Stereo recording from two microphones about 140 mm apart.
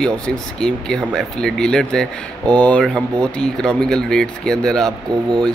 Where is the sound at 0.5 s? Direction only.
5° left (ahead or behind).